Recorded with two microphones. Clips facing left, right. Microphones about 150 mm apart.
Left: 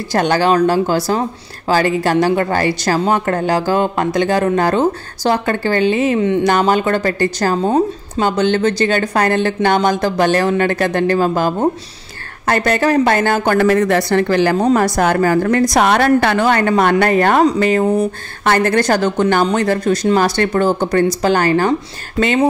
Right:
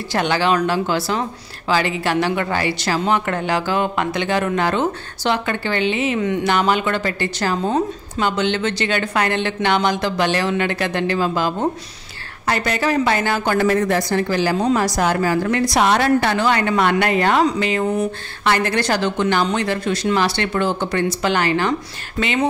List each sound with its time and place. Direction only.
0.1 s a woman's voice: 45° left (ahead or behind)
13.6 s a woman's voice: 75° left (ahead or behind); by 21.7 s 45° left (ahead or behind)
22.2 s a woman's voice: 30° left (ahead or behind)